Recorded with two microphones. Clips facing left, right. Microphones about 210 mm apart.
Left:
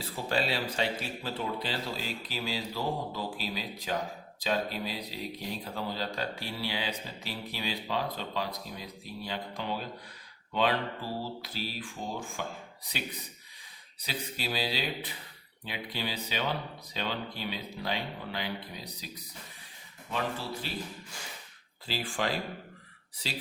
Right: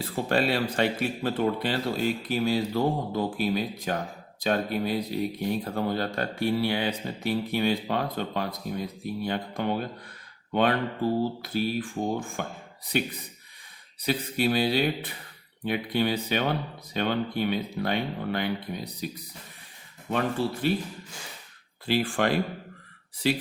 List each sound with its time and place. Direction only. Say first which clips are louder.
0.0 s speech: right 6 dB; 55° right (ahead or behind)
14.0 s speech: right 11 dB; 55° right (ahead or behind)
21.8 s speech: right 8 dB; 60° right (ahead or behind)